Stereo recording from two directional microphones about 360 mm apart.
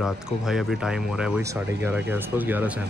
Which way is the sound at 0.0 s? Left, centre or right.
Centre.